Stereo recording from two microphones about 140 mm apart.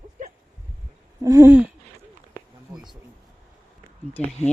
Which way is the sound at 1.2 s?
20° right (ahead or behind).